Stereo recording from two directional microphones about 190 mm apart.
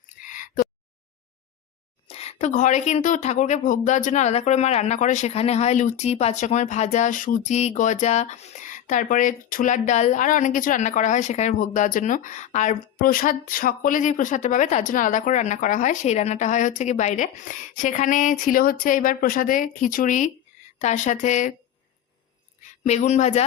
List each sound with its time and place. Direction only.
0.1 s a sound: 45° left (ahead or behind)
2.0 s speech: 35° left (ahead or behind)
22.6 s speech: 40° left (ahead or behind)